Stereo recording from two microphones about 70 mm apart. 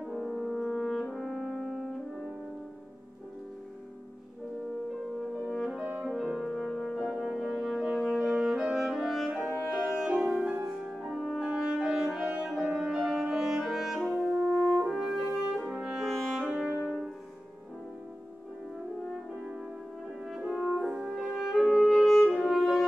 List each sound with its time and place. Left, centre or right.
0.0 s french horn: centre
1.1 s brass instrument: centre
5.4 s french horn: centre
5.8 s music: centre
6.6 s french horn: centre
10.0 s music: centre
10.8 s french horn: centre
12.6 s music: centre
14.3 s french horn: centre
16.0 s music: centre
20.2 s french horn: centre